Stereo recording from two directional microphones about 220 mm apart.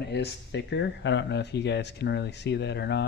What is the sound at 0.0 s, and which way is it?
Speech, 50° left (ahead or behind).